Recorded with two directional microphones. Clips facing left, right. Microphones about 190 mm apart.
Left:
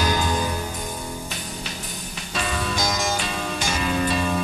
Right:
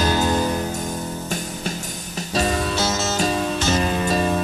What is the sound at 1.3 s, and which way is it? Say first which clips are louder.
Music: right 6 dB; 45° right (ahead or behind).